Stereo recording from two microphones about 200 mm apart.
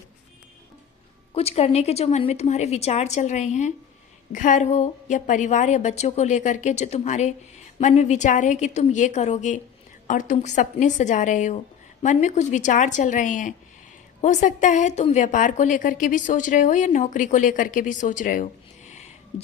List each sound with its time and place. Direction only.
1.3 s a woman's voice: 30° left (ahead or behind)